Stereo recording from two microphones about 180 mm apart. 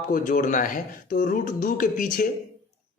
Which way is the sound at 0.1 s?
45° left (ahead or behind).